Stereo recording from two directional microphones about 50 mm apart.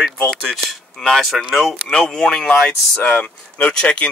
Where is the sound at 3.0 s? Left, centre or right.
Left.